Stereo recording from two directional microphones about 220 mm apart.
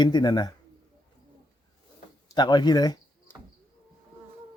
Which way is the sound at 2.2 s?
20° left (ahead or behind).